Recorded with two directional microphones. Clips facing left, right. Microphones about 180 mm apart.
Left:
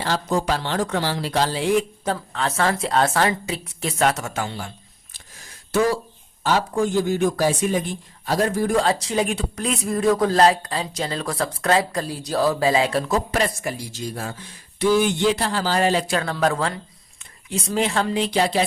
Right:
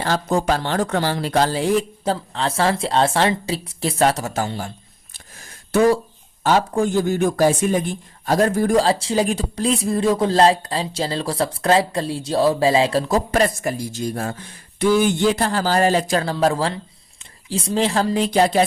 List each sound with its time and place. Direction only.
0.0 s speech: 50° right (ahead or behind)
6.4 s speech: 50° right (ahead or behind)
8.8 s speech: 30° right (ahead or behind); by 18.6 s 45° right (ahead or behind)